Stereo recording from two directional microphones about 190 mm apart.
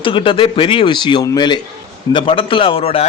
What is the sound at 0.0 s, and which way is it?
A man's voice, 25° left (ahead or behind).